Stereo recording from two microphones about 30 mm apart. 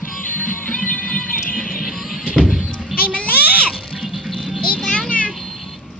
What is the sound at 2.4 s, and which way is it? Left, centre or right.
Music, centre.